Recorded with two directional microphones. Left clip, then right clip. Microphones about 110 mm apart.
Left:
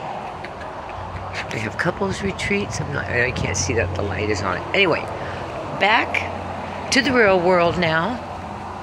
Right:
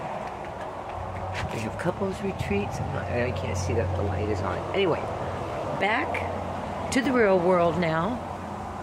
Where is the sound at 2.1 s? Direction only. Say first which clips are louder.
Left 7 dB; 40° left (ahead or behind).